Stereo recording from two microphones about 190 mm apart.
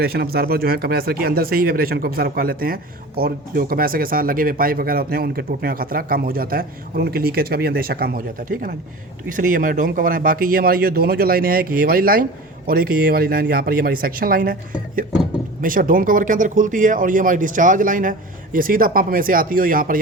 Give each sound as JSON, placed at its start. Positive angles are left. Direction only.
{"t": 0.0, "sound": "speech", "side_deg": -55}
{"t": 15.6, "sound": "speech", "side_deg": -45}